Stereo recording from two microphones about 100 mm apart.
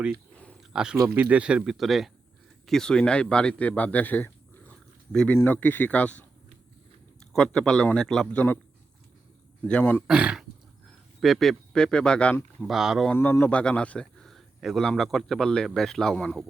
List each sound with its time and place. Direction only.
0.7 s a man's voice: 5° right (ahead or behind); by 6.2 s 15° left (ahead or behind)
7.3 s speech: 5° left (ahead or behind)
9.6 s speech: 15° left (ahead or behind)
10.1 s speech: 10° right (ahead or behind)
11.2 s speech: centre (ahead or behind)
12.6 s speech: 5° right (ahead or behind)
13.4 s speech: 10° left (ahead or behind)